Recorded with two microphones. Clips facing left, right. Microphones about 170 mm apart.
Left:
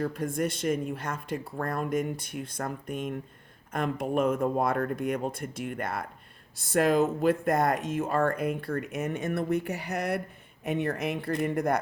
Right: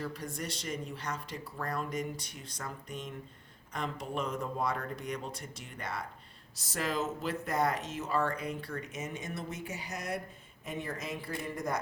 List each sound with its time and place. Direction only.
0.0 s speech: 50° left (ahead or behind)